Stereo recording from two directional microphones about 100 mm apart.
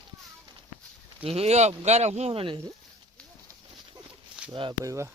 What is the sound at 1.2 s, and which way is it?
Speech, 90° right.